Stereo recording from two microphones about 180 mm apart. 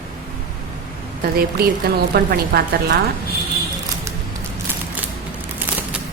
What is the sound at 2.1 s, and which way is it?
Speech, 60° right (ahead or behind).